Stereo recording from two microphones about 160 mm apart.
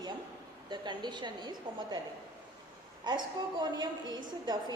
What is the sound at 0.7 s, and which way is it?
A woman's voice, 30° right (ahead or behind).